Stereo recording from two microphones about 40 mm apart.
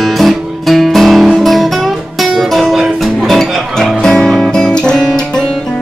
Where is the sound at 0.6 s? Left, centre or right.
Centre.